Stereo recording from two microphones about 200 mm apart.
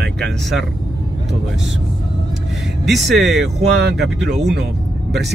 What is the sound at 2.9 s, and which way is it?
Speech, centre (ahead or behind).